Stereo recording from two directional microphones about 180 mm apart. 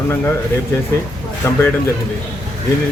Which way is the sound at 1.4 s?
15° left (ahead or behind).